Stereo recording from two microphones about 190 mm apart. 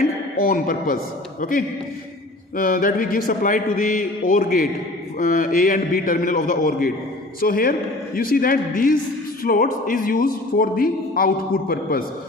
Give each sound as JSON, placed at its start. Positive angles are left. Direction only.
{"t": 0.3, "sound": "speech", "side_deg": 45}